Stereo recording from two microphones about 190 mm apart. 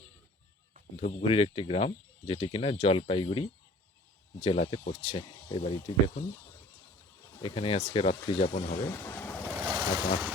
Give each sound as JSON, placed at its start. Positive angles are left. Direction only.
{"t": 0.9, "sound": "speech", "side_deg": 35}
{"t": 7.4, "sound": "speech", "side_deg": 30}
{"t": 8.7, "sound": "speech", "side_deg": 15}
{"t": 9.6, "sound": "speech", "side_deg": -10}